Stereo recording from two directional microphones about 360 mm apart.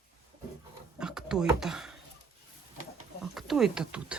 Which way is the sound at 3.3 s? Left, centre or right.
Centre.